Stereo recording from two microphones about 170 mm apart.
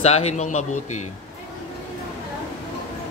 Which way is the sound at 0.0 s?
40° left (ahead or behind).